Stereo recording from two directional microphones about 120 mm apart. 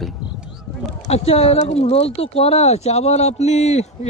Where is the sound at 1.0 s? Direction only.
60° left (ahead or behind).